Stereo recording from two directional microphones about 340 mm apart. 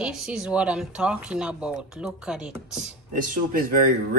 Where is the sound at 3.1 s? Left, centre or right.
Right.